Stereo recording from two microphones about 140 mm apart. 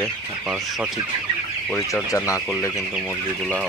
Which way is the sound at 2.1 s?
20° left (ahead or behind).